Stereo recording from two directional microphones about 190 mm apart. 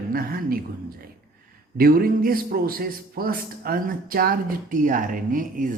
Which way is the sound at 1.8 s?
50° right (ahead or behind).